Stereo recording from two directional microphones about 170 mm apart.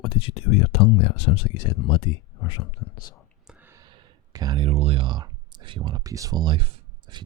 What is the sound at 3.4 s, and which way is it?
Speech, 10° right (ahead or behind).